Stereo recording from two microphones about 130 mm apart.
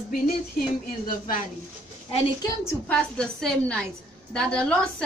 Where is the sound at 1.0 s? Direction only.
90° left.